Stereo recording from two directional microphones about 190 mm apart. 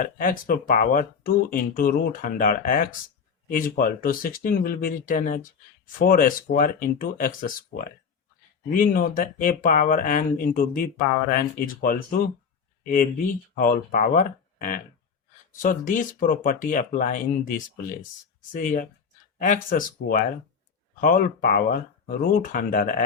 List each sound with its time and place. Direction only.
0.0 s speech: 45° left (ahead or behind)